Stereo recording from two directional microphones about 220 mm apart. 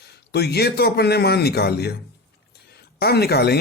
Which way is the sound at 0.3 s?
45° left (ahead or behind).